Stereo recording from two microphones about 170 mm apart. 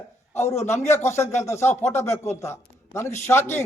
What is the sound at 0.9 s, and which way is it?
Speech, 15° left (ahead or behind).